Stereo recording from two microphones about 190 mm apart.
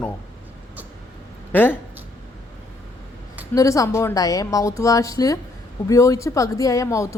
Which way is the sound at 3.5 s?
15° left (ahead or behind).